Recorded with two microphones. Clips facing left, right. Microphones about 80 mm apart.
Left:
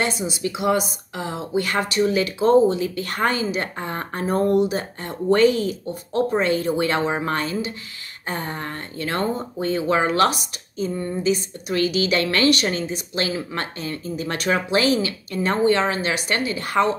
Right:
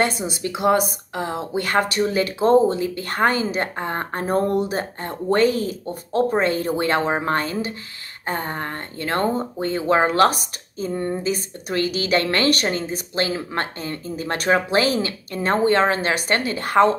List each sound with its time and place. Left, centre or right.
0.0 s speech: right